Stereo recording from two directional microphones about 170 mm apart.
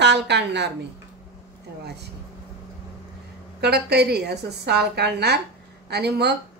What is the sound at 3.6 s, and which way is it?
A woman's voice, 70° right (ahead or behind).